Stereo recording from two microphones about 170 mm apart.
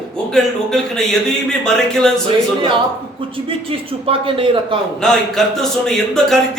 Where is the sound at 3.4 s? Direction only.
30° right (ahead or behind).